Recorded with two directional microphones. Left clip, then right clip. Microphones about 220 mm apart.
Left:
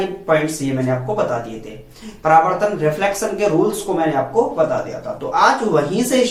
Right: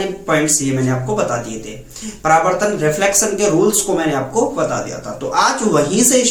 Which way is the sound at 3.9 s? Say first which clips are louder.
Even; 10° right (ahead or behind).